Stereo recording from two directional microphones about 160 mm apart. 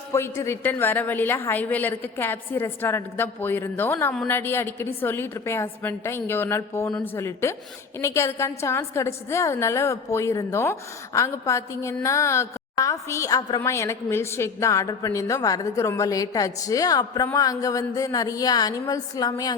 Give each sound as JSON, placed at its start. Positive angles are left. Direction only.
{"t": 0.1, "sound": "a woman's voice", "side_deg": 15}